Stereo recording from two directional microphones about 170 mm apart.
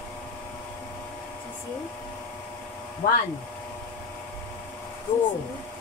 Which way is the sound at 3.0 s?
55° left (ahead or behind).